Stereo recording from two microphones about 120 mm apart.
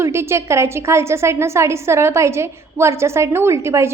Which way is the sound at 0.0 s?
20° right (ahead or behind).